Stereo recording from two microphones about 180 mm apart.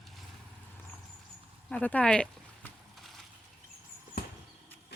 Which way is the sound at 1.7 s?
5° left (ahead or behind).